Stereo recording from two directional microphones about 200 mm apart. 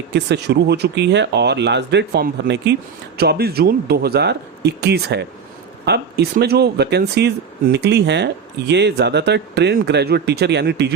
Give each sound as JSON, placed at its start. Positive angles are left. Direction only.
{"t": 0.1, "sound": "speech", "side_deg": -60}